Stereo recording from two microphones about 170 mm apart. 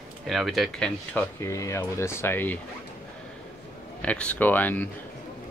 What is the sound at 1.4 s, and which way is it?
Speech, 15° left (ahead or behind).